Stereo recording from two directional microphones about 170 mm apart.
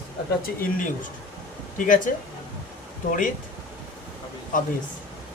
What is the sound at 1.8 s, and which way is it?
Speech, 50° left (ahead or behind).